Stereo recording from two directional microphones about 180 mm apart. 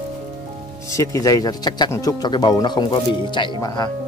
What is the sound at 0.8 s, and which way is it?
Speech, 15° left (ahead or behind).